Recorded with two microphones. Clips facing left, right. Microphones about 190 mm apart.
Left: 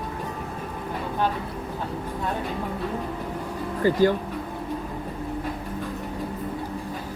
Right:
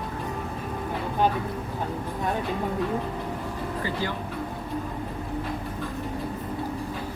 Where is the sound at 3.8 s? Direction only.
45° left (ahead or behind).